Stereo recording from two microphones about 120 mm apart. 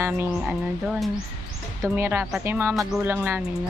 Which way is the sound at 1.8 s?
20° right (ahead or behind).